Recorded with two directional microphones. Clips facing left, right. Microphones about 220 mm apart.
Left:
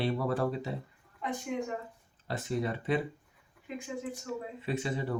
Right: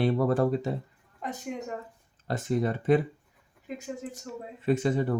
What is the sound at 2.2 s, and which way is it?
Speech, 45° right (ahead or behind).